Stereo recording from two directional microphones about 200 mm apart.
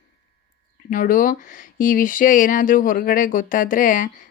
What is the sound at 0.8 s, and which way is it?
Speech, 45° left (ahead or behind).